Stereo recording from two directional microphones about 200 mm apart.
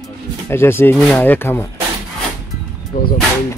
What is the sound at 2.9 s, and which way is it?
Speech, 45° left (ahead or behind).